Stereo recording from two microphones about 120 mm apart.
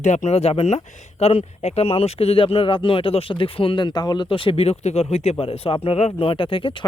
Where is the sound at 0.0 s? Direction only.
75° left (ahead or behind).